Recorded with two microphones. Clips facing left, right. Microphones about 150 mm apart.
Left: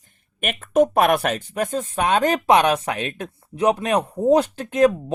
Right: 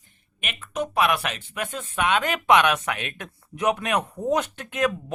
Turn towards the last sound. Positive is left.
turn(degrees=35)  # may be behind; listen again after turning